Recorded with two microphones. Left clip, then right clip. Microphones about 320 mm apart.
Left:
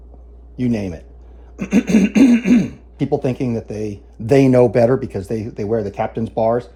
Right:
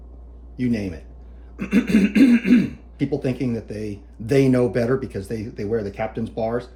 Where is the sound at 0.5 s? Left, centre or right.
Left.